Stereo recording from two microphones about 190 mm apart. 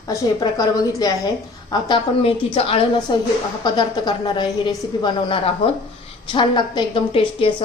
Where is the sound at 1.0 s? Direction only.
20° left (ahead or behind).